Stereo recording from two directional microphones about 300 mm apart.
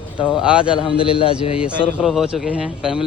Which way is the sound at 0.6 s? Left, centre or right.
Centre.